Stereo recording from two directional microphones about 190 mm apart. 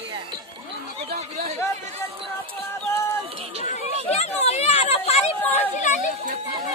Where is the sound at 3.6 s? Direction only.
35° left (ahead or behind).